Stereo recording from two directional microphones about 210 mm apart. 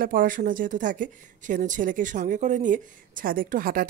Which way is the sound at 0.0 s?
40° right (ahead or behind).